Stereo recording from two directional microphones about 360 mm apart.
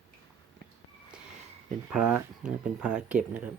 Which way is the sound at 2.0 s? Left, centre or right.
Right.